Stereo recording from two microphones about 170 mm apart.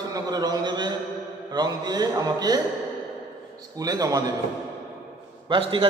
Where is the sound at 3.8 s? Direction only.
20° right (ahead or behind).